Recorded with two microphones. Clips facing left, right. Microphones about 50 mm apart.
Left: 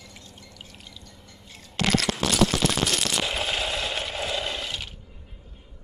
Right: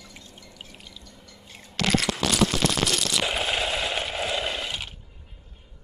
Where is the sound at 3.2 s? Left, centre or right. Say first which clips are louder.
Right 1 dB; centre.